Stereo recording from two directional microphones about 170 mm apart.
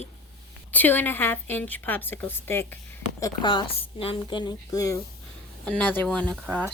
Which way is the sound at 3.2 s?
30° left (ahead or behind).